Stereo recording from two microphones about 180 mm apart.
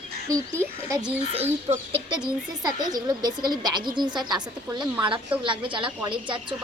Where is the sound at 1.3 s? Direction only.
35° right (ahead or behind).